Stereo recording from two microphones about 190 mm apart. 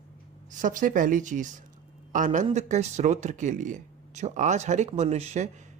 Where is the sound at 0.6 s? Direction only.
45° right (ahead or behind).